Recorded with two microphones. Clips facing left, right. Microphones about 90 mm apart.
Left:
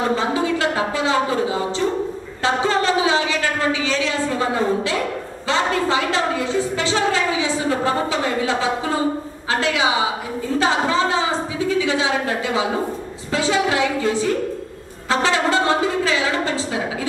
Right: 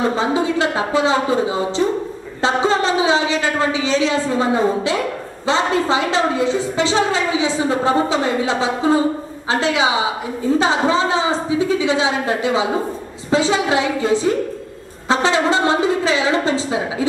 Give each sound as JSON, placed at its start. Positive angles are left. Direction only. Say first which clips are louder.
{"t": 0.1, "sound": "a woman's voice", "louder": "right 2 dB", "side_deg": -20}